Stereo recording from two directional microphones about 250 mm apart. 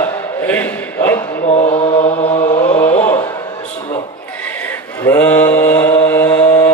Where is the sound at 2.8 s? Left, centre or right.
Centre.